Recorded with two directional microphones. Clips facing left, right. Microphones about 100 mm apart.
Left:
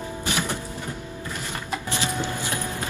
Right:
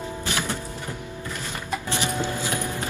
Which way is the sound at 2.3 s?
20° right (ahead or behind).